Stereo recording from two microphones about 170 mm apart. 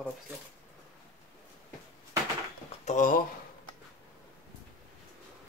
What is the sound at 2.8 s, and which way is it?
Speech, 50° left (ahead or behind).